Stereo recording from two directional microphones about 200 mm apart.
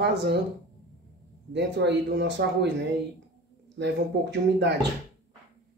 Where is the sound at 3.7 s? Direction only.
60° right (ahead or behind).